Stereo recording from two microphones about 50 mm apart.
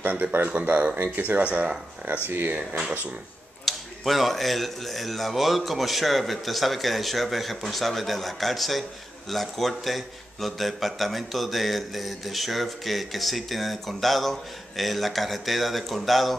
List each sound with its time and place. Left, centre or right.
0.0 s speech: right
0.5 s speech: right
1.4 s speech: right
2.2 s speech: right
3.6 s a man's voice: centre